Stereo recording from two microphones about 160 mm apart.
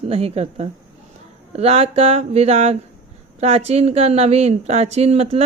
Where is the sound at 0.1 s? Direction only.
40° right (ahead or behind).